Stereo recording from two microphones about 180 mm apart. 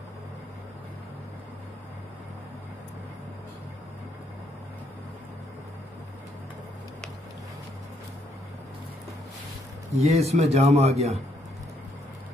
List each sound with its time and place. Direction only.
9.9 s a man's voice: 35° right (ahead or behind)